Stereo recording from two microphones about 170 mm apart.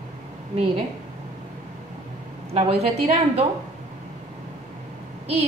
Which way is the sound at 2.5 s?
40° right (ahead or behind).